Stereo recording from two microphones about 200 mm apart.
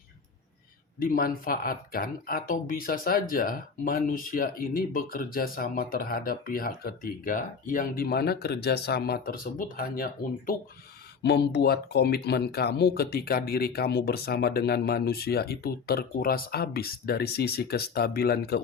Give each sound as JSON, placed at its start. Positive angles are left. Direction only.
{"t": 0.9, "sound": "speech", "side_deg": 45}